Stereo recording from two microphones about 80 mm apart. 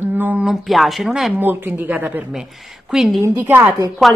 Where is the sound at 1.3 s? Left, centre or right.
Right.